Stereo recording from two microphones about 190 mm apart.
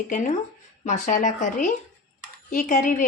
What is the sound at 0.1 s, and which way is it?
A woman's voice, 40° left (ahead or behind).